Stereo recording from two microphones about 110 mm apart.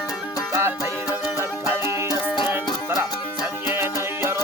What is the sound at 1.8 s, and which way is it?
Music, 40° left (ahead or behind).